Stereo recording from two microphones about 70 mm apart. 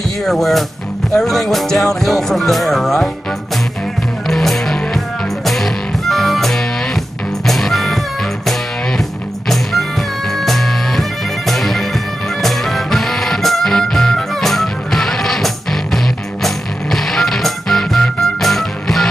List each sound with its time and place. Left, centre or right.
0.2 s speech: centre
4.3 s music: centre
9.5 s music: centre